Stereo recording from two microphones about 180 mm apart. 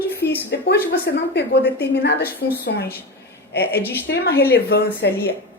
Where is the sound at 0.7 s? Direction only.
70° left (ahead or behind).